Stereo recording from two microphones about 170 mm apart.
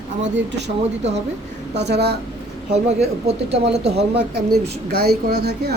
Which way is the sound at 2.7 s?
40° right (ahead or behind).